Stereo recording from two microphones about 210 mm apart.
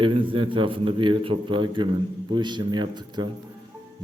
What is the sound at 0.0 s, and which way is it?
A man's voice, 25° right (ahead or behind).